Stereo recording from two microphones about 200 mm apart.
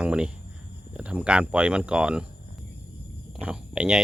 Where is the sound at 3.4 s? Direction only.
5° right (ahead or behind).